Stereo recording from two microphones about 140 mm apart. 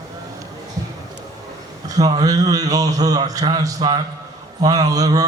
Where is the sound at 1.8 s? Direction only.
25° right (ahead or behind).